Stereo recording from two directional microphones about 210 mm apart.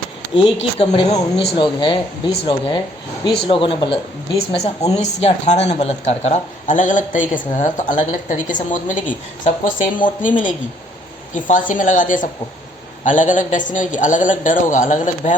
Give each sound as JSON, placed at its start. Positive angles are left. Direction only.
{"t": 0.3, "sound": "speech", "side_deg": 25}